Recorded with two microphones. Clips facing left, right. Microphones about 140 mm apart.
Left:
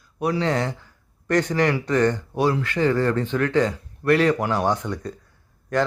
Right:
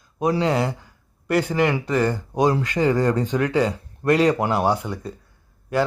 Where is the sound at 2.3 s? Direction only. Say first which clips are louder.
Right 2 dB; 20° right (ahead or behind).